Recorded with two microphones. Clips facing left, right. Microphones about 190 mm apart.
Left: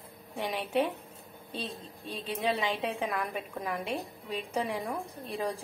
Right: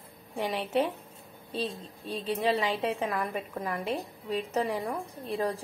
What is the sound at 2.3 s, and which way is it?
A woman's voice, centre (ahead or behind).